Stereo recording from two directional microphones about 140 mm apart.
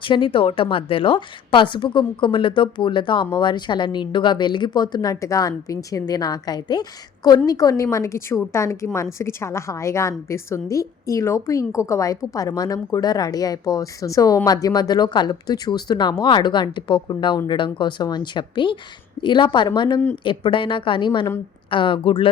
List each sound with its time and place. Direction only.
0.0 s a woman's voice: 35° left (ahead or behind)